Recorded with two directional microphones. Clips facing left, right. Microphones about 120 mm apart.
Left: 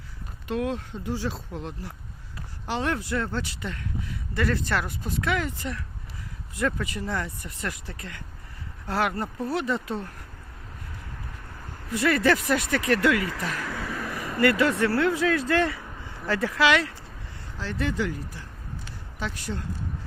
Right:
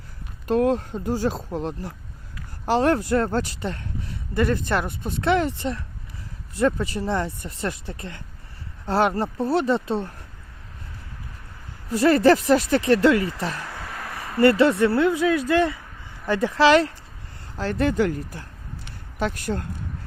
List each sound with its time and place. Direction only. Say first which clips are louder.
0.4 s speech: right 8 dB; 40° right (ahead or behind)
11.9 s speech: right 6 dB; 35° right (ahead or behind)
14.3 s speech: right 5 dB; 30° right (ahead or behind)
17.6 s speech: right 7 dB; 45° right (ahead or behind)
18.9 s a sound: right 8 dB; 55° right (ahead or behind)